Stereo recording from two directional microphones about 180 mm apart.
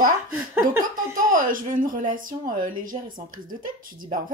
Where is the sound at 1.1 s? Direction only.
50° right (ahead or behind).